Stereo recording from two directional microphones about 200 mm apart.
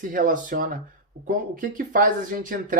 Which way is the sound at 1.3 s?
45° right (ahead or behind).